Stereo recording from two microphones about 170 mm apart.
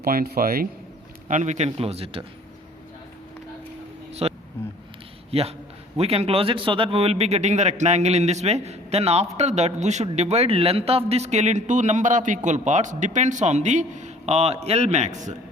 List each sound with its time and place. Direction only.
0.0 s a man's voice: 60° right (ahead or behind)
1.3 s a man's voice: 45° right (ahead or behind)
4.1 s a sound: 35° right (ahead or behind)
5.3 s a man's voice: 35° right (ahead or behind)